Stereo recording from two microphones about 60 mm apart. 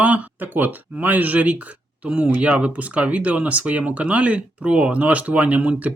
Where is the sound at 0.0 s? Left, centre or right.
Right.